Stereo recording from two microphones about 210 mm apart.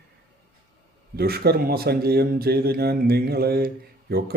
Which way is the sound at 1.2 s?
50° right (ahead or behind).